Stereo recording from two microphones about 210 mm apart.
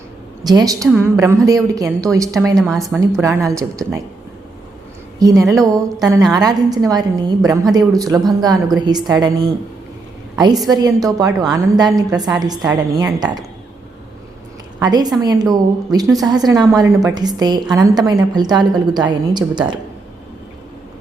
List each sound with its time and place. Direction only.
0.4 s a woman's voice: 15° right (ahead or behind)
2.6 s speech: centre (ahead or behind)
3.2 s a woman's voice: 15° right (ahead or behind)
5.2 s a woman's voice: 15° right (ahead or behind)
10.3 s a woman's voice: 20° right (ahead or behind)
14.8 s a woman's voice: 20° right (ahead or behind)